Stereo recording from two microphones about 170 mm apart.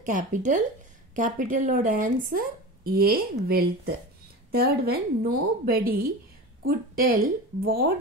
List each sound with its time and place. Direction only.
0.0 s speech: 50° right (ahead or behind)